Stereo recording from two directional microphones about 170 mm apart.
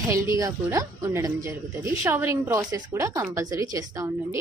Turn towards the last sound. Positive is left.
turn(degrees=-20)  # may be behind; listen again after turning